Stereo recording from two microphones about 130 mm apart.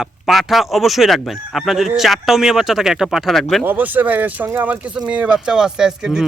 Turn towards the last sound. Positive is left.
turn(degrees=-5)  # may be behind; listen again after turning